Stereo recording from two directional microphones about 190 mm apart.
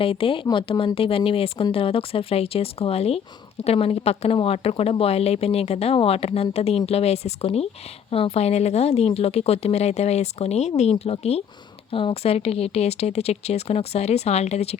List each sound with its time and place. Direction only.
0.0 s speech: 30° left (ahead or behind)